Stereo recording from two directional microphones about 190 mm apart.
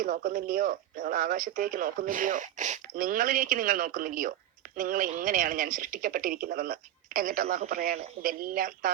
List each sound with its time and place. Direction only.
0.0 s speech: 45° right (ahead or behind)